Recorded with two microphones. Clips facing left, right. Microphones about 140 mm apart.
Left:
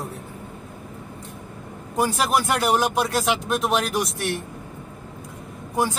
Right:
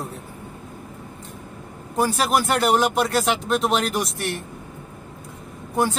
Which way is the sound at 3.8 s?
15° left (ahead or behind).